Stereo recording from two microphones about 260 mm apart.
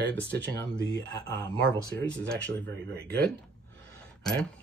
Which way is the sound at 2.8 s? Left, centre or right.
Right.